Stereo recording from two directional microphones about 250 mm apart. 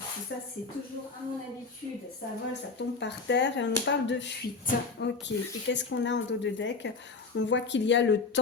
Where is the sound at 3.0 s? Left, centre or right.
Left.